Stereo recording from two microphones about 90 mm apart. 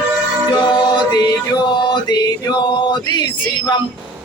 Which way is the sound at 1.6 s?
55° left (ahead or behind).